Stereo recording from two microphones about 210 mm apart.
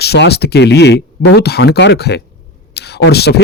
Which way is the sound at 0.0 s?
50° left (ahead or behind).